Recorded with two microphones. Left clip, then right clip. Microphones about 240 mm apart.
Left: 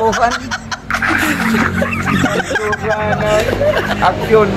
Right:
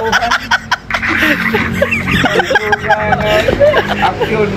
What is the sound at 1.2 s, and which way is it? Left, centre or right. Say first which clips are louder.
Speech: right 3 dB; centre.